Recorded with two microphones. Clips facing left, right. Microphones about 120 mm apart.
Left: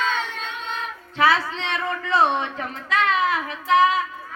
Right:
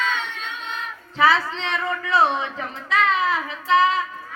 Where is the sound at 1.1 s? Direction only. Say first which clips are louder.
Right 1 dB; centre (ahead or behind).